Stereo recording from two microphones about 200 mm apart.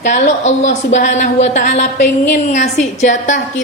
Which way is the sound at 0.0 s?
35° left (ahead or behind).